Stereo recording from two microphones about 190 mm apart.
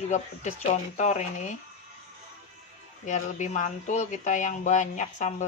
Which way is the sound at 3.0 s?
40° left (ahead or behind).